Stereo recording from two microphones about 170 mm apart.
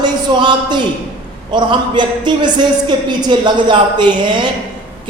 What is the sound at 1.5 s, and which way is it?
A man's voice, 25° right (ahead or behind).